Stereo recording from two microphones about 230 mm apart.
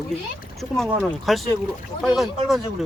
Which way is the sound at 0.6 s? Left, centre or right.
Centre.